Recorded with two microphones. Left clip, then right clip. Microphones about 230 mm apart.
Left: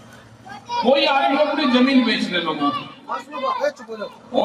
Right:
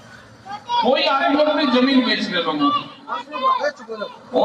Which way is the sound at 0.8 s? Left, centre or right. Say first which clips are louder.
Left 1 dB; left.